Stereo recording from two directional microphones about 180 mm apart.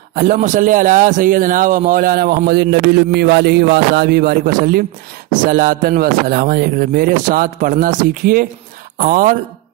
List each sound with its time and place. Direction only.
0.1 s a man's voice: 50° right (ahead or behind)